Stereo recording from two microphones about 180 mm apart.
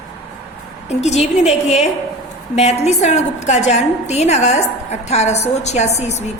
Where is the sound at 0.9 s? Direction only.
40° left (ahead or behind).